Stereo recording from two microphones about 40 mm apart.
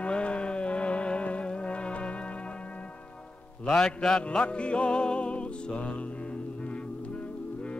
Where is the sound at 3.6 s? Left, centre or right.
Centre; by 5.9 s left.